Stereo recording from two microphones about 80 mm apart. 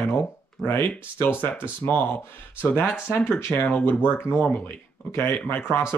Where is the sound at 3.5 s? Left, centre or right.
Left.